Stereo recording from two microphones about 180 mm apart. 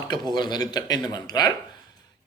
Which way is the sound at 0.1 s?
25° left (ahead or behind).